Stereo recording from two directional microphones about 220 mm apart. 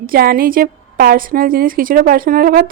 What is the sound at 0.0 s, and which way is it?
A woman's voice, 40° right (ahead or behind).